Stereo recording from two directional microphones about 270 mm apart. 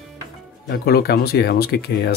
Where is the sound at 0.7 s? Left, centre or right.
Left.